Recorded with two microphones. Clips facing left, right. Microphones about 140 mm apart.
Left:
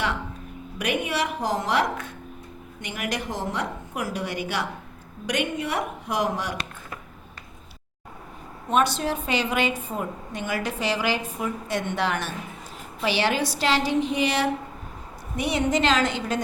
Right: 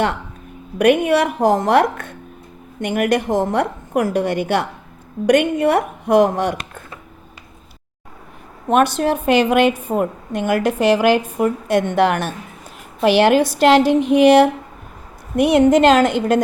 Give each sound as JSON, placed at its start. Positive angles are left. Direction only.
{"t": 0.8, "sound": "a woman's voice", "side_deg": -55}
{"t": 8.7, "sound": "a woman's voice", "side_deg": -55}